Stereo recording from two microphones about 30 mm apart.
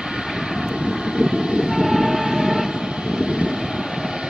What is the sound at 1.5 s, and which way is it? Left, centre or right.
Train, right.